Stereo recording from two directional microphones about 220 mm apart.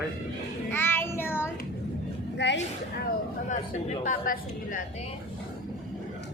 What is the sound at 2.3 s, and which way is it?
Speech, 55° left (ahead or behind).